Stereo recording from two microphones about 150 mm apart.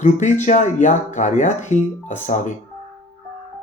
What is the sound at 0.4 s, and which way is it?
Speech, 55° left (ahead or behind).